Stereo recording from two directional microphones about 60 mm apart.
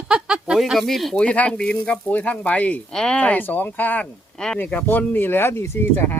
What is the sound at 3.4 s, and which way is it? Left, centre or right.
Speech, left.